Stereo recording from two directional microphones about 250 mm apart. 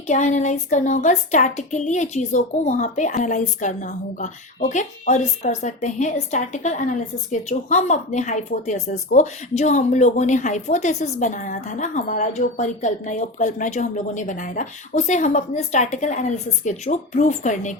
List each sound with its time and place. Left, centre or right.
0.1 s a woman's voice: left